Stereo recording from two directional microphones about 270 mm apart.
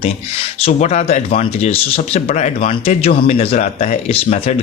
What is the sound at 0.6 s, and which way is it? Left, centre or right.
Speech, left.